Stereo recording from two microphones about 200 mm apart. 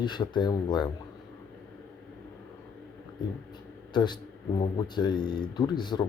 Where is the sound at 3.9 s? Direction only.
20° left (ahead or behind).